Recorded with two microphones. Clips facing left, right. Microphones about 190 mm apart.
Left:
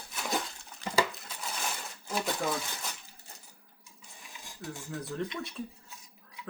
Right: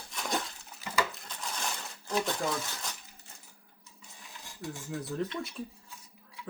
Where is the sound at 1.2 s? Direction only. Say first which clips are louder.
Even; 5° left (ahead or behind).